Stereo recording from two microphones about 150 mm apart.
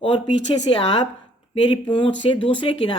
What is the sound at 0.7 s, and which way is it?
Speech, 35° left (ahead or behind).